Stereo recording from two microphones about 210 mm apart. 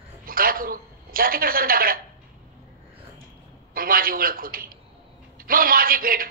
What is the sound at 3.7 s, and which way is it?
A man's voice, 45° right (ahead or behind).